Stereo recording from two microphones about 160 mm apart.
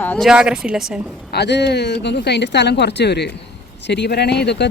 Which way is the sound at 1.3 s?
90° left.